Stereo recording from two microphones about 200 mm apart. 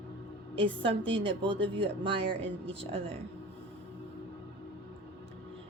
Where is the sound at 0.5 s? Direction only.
25° right (ahead or behind).